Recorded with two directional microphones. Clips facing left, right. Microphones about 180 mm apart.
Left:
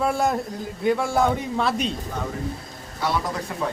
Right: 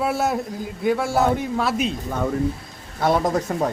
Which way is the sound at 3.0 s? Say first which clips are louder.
Right 6 dB; 45° right (ahead or behind).